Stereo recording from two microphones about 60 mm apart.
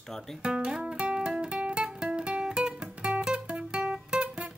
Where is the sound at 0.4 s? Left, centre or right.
Centre.